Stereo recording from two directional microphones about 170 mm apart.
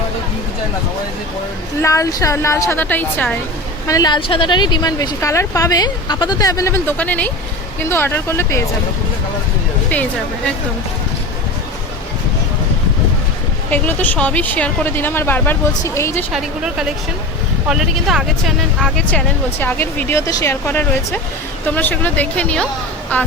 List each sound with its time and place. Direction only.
1.8 s speech: 20° left (ahead or behind)
3.8 s speech: 20° left (ahead or behind)
13.7 s speech: 10° left (ahead or behind)
16.3 s a woman's voice: 5° right (ahead or behind)